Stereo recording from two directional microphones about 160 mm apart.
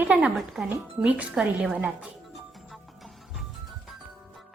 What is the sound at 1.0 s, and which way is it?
Music, 5° right (ahead or behind).